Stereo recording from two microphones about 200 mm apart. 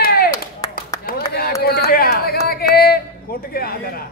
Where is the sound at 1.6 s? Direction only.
50° left (ahead or behind).